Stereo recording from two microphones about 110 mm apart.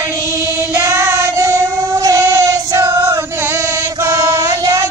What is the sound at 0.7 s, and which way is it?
Child singing, 25° right (ahead or behind).